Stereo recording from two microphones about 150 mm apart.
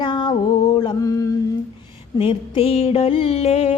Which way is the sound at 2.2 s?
40° left (ahead or behind).